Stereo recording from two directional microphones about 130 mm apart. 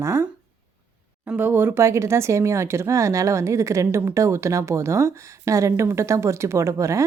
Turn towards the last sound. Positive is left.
turn(degrees=-25)  # may be behind; listen again after turning